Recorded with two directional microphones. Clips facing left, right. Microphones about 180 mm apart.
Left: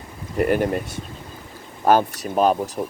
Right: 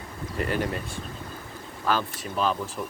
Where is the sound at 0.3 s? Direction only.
50° left (ahead or behind).